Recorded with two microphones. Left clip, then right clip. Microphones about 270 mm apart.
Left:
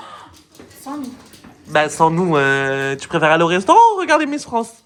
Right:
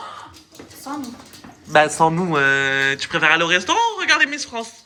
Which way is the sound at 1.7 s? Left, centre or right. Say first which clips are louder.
Even; centre.